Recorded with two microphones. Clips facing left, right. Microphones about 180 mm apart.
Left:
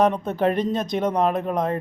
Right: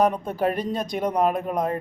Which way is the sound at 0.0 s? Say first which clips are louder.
Left 2 dB; 10° right (ahead or behind).